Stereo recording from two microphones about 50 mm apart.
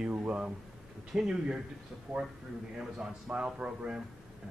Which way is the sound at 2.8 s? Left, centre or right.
Centre.